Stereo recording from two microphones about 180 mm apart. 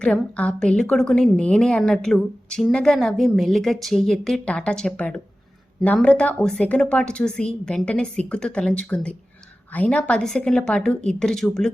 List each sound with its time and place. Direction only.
0.0 s a woman's voice: 5° left (ahead or behind)